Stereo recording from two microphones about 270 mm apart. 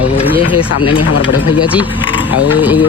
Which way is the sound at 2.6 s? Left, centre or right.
Centre.